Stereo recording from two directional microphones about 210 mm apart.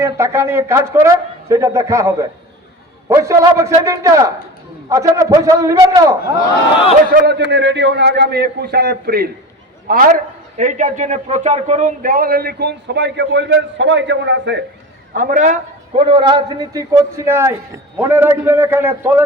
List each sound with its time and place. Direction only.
0.0 s a man's voice: 15° right (ahead or behind)
7.1 s a man's voice: 55° right (ahead or behind)
15.1 s a man's voice: 40° right (ahead or behind); by 19.2 s 10° right (ahead or behind)